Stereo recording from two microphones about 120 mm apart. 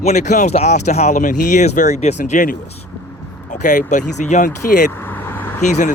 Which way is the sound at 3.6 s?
90° left.